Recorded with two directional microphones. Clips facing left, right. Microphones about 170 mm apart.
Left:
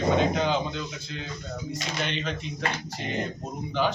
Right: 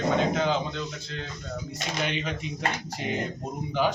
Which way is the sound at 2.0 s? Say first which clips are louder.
Right 1 dB; 10° right (ahead or behind).